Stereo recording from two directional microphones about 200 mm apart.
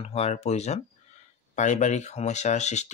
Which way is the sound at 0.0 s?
30° left (ahead or behind).